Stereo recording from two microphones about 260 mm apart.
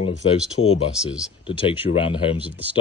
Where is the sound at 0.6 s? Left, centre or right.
Left.